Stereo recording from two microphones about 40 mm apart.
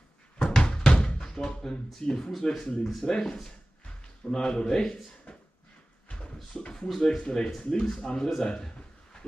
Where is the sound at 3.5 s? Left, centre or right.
Left.